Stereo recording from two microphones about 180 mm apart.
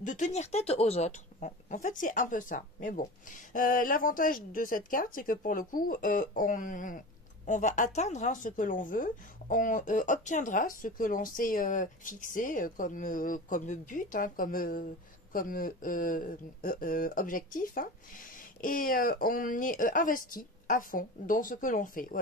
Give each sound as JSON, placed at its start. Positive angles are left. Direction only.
{"t": 0.0, "sound": "a woman's voice", "side_deg": 45}